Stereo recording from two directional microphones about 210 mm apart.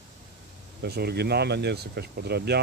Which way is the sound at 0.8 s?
50° right (ahead or behind).